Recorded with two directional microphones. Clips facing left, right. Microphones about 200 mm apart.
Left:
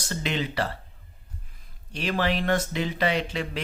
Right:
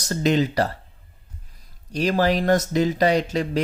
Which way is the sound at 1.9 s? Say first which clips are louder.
Right 6 dB; 40° right (ahead or behind).